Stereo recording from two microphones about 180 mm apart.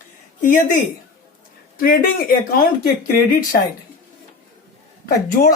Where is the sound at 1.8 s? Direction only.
55° left (ahead or behind).